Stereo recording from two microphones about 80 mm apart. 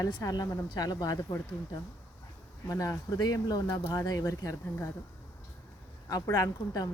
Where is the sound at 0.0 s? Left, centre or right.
Left.